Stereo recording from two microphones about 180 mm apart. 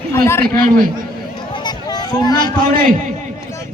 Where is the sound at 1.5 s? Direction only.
25° left (ahead or behind).